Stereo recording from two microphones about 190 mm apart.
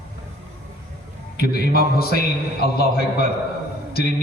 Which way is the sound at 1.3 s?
55° left (ahead or behind).